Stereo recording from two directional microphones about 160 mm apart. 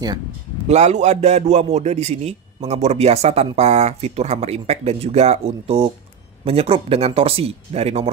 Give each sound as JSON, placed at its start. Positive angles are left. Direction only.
{"t": 0.7, "sound": "a man's voice", "side_deg": -45}